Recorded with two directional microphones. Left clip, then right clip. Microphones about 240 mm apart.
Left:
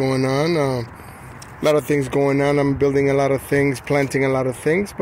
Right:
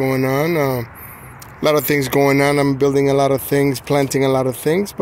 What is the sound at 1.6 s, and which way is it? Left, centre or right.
Speech, centre.